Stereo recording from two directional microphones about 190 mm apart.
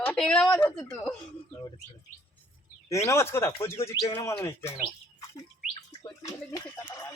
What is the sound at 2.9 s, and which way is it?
Speech, 15° left (ahead or behind).